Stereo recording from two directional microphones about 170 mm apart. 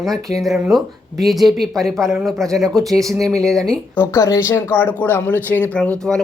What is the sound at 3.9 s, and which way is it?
Speech, 15° left (ahead or behind).